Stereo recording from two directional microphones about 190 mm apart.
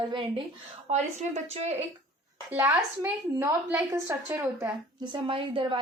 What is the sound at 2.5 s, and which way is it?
A woman's voice, 10° right (ahead or behind).